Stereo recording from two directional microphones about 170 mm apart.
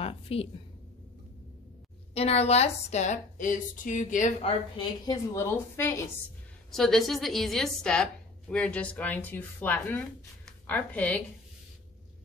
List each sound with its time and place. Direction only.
0.0 s speech: 35° left (ahead or behind)
2.1 s a woman's voice: 35° left (ahead or behind)
4.7 s a woman's voice: 25° left (ahead or behind)
6.7 s a woman's voice: centre (ahead or behind)